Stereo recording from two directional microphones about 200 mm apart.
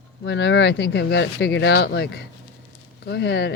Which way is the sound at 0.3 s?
60° left (ahead or behind).